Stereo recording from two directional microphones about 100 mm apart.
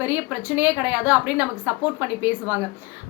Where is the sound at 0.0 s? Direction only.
20° right (ahead or behind).